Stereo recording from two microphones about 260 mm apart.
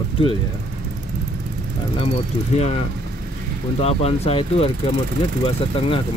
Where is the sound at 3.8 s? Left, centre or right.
Left.